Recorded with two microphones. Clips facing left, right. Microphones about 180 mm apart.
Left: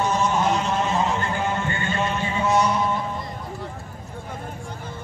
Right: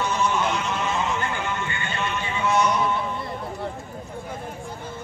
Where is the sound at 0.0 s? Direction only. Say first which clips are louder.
Left 2 dB; 40° left (ahead or behind).